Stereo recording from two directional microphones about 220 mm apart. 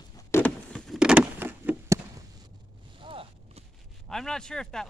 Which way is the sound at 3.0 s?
25° right (ahead or behind).